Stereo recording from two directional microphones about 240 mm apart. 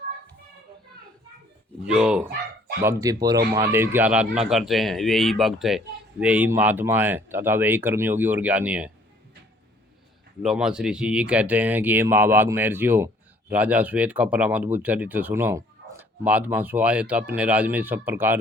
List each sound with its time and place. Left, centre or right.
1.8 s speech: centre
10.4 s speech: centre